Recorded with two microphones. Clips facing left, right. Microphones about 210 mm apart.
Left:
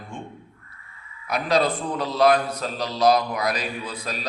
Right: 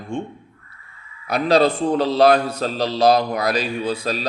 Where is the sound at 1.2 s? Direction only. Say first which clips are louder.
Right 6 dB; 30° right (ahead or behind).